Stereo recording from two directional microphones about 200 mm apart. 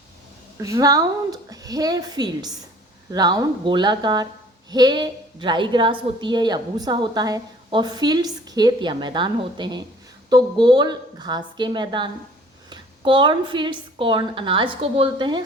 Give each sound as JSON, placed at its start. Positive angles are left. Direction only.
{"t": 0.6, "sound": "a woman's voice", "side_deg": -15}